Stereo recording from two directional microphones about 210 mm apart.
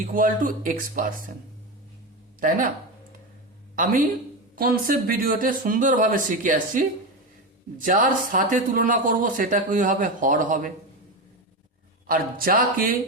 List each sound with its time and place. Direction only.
0.0 s speech: 40° right (ahead or behind)
2.4 s speech: 40° right (ahead or behind)
4.5 s speech: 45° right (ahead or behind)
12.0 s speech: 45° right (ahead or behind)